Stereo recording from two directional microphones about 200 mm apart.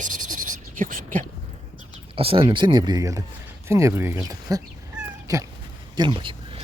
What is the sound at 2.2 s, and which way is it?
Speech, 25° right (ahead or behind).